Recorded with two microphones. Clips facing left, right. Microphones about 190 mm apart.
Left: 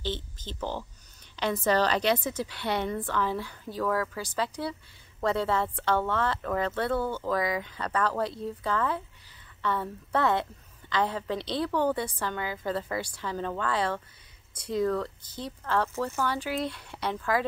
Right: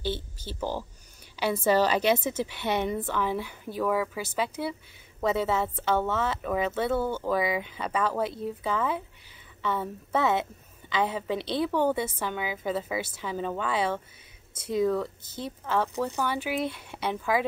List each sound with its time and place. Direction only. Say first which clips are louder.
0.0 s speech: right 2 dB; 10° right (ahead or behind)
2.1 s speech: right 2 dB; 25° right (ahead or behind)
4.2 s speech: right 1 dB; 25° right (ahead or behind)
5.2 s speech: right 1 dB; 5° right (ahead or behind)
7.0 s a woman's voice: right 2 dB; 25° right (ahead or behind)